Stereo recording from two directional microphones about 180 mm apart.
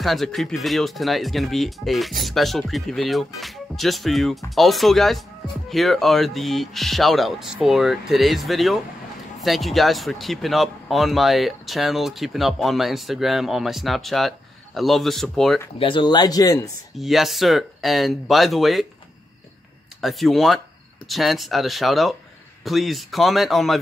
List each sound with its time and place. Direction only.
0.0 s speech: centre (ahead or behind)
15.8 s speech: 25° left (ahead or behind)
16.9 s speech: centre (ahead or behind)
20.0 s speech: centre (ahead or behind)